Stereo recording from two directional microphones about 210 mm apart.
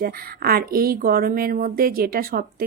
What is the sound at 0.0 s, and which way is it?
Speech, 45° right (ahead or behind).